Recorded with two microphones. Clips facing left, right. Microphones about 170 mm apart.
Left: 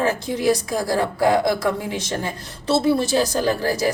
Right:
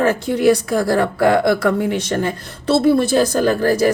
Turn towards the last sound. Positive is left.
turn(degrees=-55)  # may be behind; listen again after turning